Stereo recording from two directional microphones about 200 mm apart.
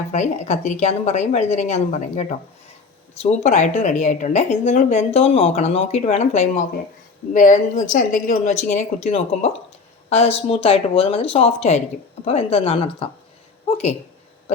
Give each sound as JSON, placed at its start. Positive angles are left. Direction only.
{"t": 0.1, "sound": "speech", "side_deg": 35}